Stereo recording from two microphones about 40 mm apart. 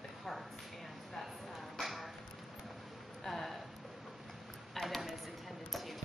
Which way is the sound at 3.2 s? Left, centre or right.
Centre.